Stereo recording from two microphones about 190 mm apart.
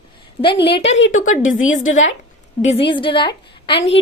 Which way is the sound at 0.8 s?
75° left (ahead or behind).